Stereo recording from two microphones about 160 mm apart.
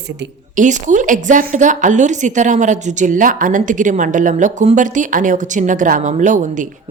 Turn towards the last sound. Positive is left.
turn(degrees=-55)  # may be behind; listen again after turning